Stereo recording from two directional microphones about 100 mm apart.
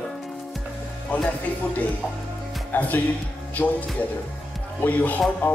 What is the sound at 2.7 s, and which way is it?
Speech, 20° left (ahead or behind).